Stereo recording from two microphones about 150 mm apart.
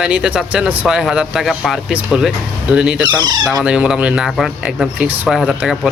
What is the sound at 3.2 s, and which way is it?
Speech, 30° right (ahead or behind).